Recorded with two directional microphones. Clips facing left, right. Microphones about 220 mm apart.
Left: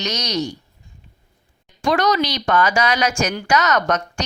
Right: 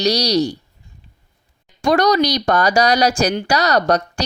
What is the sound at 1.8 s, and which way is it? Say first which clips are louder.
Speech: right 4 dB; 40° right (ahead or behind).